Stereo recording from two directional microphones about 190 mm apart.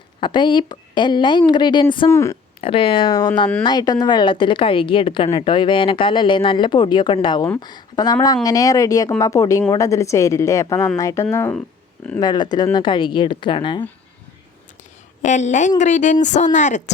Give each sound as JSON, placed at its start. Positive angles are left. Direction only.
{"t": 0.2, "sound": "a woman's voice", "side_deg": 25}
{"t": 2.0, "sound": "a woman's voice", "side_deg": 15}
{"t": 2.6, "sound": "a woman's voice", "side_deg": 30}
{"t": 12.2, "sound": "a woman's voice", "side_deg": 20}
{"t": 15.2, "sound": "speech", "side_deg": 40}